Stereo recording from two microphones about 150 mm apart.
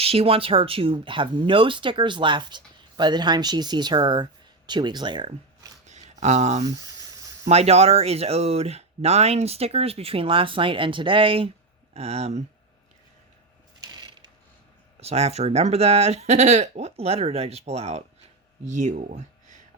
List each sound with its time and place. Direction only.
0.0 s speech: 40° right (ahead or behind)
5.8 s a sound: 50° right (ahead or behind)
7.4 s speech: 45° right (ahead or behind)
13.8 s pulleys: 25° right (ahead or behind)
15.0 s speech: 45° right (ahead or behind)